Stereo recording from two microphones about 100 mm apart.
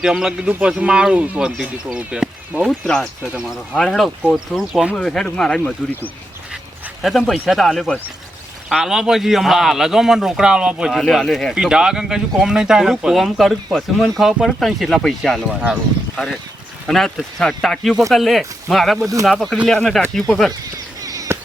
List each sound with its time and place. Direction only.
0.0 s speech: 5° right (ahead or behind)
4.9 s speech: 5° left (ahead or behind)
7.0 s speech: centre (ahead or behind)
21.0 s a sound: 35° right (ahead or behind)